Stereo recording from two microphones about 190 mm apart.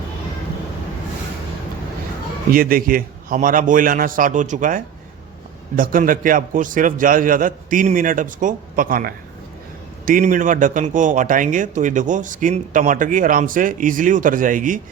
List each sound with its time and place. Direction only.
2.5 s a man's voice: 50° right (ahead or behind)